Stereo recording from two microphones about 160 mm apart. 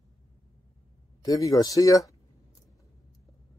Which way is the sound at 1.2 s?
20° left (ahead or behind).